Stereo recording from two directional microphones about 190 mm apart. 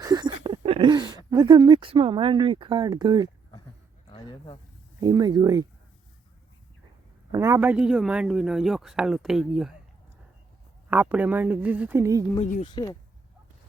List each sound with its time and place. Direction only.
0.0 s a sound: 20° right (ahead or behind)
0.4 s speech: 25° right (ahead or behind)
4.1 s speech: 25° left (ahead or behind)
4.9 s speech: 20° right (ahead or behind)
7.3 s a man's voice: 15° right (ahead or behind)
10.8 s a woman's voice: 10° right (ahead or behind)
12.4 s speech: 35° left (ahead or behind)
12.6 s speech: 20° left (ahead or behind)